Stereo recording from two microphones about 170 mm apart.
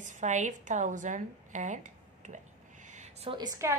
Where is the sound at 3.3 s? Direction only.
20° right (ahead or behind).